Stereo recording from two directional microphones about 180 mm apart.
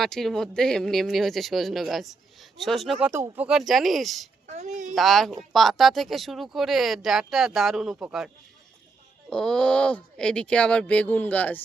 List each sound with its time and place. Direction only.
0.0 s speech: centre (ahead or behind)
4.4 s a woman's voice: 40° right (ahead or behind)
4.9 s speech: centre (ahead or behind)
9.3 s speech: 5° left (ahead or behind)